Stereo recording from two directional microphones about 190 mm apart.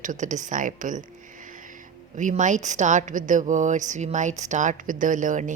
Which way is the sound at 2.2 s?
40° right (ahead or behind).